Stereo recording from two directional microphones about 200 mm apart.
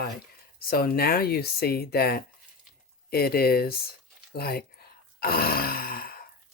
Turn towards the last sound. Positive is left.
turn(degrees=50)  # may be behind; listen again after turning